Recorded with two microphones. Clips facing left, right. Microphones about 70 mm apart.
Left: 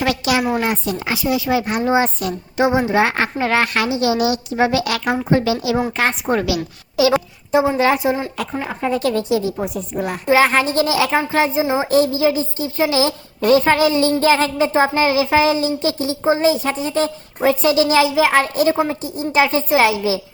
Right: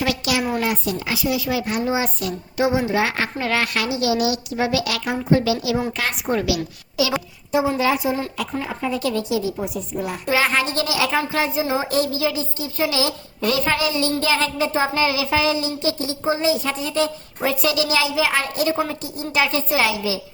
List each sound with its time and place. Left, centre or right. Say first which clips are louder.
0.0 s a woman's voice: left 4 dB; left
9.9 s a woman's voice: left 4 dB; left
10.2 s a woman's voice: left 6 dB; left
11.6 s speech: left 4 dB; left
11.9 s a woman's voice: left 6 dB; left